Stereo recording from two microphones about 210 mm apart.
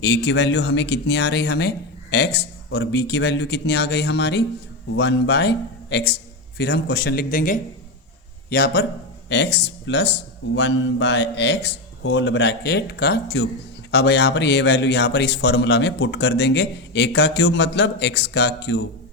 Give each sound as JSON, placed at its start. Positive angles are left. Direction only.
{"t": 0.0, "sound": "speech", "side_deg": 55}